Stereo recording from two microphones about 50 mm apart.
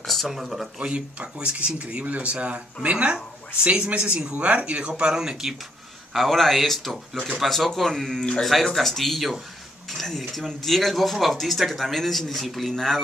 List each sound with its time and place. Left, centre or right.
0.0 s a sound: centre
0.3 s speech: centre
0.7 s speech: right
6.1 s speech: centre